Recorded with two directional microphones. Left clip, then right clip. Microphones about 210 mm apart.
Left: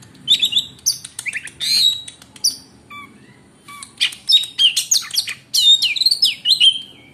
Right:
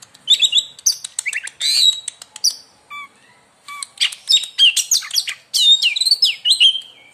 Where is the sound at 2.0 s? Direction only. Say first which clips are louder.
Right 4 dB; 45° right (ahead or behind).